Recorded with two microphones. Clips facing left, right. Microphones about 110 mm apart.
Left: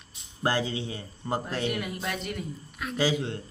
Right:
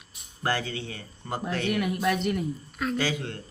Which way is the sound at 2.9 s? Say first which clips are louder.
Left 3 dB; 15° left (ahead or behind).